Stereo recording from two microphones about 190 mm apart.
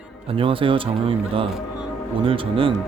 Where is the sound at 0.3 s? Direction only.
30° right (ahead or behind).